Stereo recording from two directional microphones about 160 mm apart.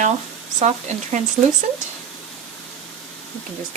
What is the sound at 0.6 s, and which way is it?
Speech, 45° right (ahead or behind).